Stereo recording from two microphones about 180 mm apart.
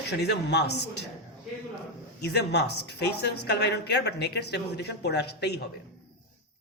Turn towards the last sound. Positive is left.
turn(degrees=65)  # may be behind; listen again after turning